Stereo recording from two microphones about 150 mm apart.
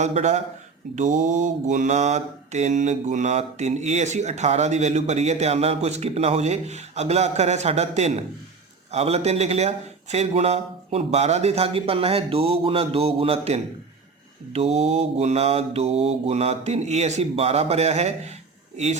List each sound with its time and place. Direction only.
0.0 s mantra: 50° right (ahead or behind)